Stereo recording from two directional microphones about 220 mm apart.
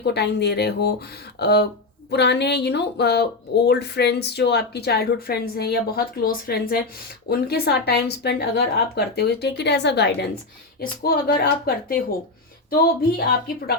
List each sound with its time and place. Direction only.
0.0 s speech: 50° left (ahead or behind)